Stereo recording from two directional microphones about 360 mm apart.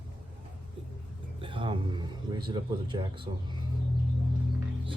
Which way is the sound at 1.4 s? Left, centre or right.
Centre.